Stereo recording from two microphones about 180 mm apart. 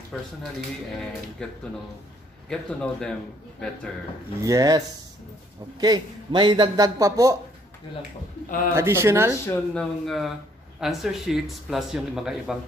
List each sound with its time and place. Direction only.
0.9 s speech: 5° left (ahead or behind)
4.4 s a man's voice: 20° right (ahead or behind)
8.7 s speech: 15° right (ahead or behind)
9.5 s speech: 5° left (ahead or behind)